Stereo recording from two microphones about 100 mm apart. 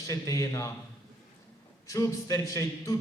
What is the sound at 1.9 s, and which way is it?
A man's voice, 35° left (ahead or behind).